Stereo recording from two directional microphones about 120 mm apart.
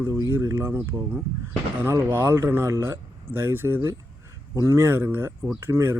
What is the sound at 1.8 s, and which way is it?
Speech, 20° right (ahead or behind).